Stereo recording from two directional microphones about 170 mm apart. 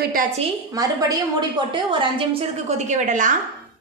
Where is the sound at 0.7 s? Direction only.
20° right (ahead or behind); by 3.3 s 45° right (ahead or behind).